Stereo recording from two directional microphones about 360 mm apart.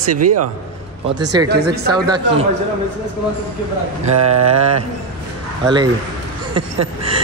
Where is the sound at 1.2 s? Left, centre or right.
Centre.